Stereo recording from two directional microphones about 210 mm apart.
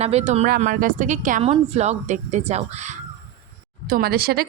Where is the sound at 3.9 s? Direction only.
45° right (ahead or behind).